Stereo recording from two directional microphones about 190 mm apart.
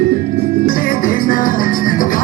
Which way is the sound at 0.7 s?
50° left (ahead or behind).